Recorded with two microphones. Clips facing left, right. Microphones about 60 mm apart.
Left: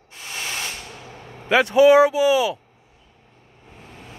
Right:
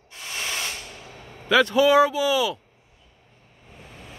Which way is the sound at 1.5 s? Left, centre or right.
Left.